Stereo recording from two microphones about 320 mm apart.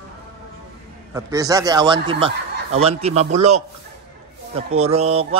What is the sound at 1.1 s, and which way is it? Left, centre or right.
Speech, centre.